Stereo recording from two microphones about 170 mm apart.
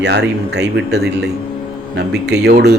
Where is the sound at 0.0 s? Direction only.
80° right.